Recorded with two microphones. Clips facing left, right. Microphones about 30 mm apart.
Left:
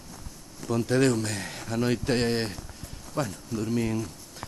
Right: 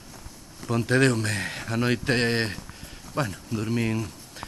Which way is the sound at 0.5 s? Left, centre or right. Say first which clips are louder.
Right 2 dB; right.